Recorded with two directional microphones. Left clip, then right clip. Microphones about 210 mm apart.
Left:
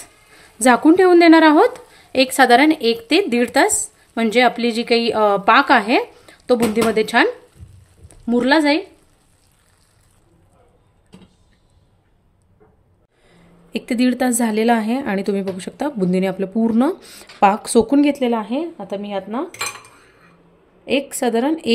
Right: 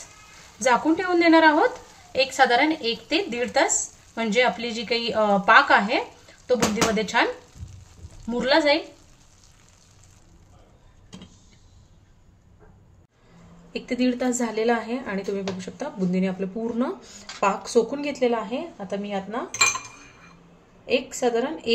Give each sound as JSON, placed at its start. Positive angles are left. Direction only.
{"t": 0.6, "sound": "a woman's voice", "side_deg": 55}
{"t": 8.3, "sound": "a woman's voice", "side_deg": 50}
{"t": 13.7, "sound": "a woman's voice", "side_deg": 55}
{"t": 20.8, "sound": "a woman's voice", "side_deg": 55}